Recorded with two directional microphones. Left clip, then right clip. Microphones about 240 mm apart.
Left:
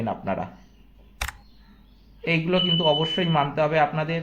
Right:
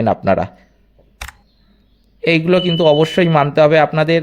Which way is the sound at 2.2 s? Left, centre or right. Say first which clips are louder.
Right 9 dB; right.